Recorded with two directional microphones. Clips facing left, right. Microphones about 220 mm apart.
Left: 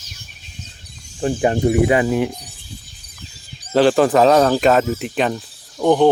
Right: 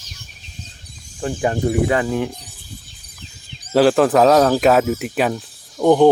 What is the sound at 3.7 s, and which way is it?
Speech, centre (ahead or behind).